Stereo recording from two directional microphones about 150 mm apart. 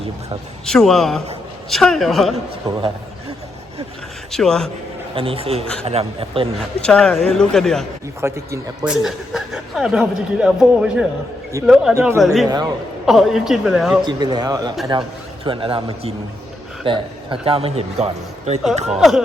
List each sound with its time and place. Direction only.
0.6 s speech: 5° left (ahead or behind)
4.3 s speech: 5° left (ahead or behind)
5.1 s a man's voice: 40° right (ahead or behind)
6.8 s speech: 5° left (ahead or behind)
8.2 s speech: 15° right (ahead or behind)
8.9 s speech: 5° right (ahead or behind)
11.9 s speech: 20° right (ahead or behind)
12.2 s speech: centre (ahead or behind)
12.5 s speech: 25° right (ahead or behind)
13.1 s speech: centre (ahead or behind)
14.0 s a man's voice: 30° right (ahead or behind); by 18.6 s 45° right (ahead or behind)
18.9 s speech: centre (ahead or behind)